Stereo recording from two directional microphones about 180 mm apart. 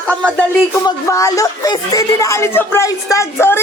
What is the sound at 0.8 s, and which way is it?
Speech, 20° left (ahead or behind).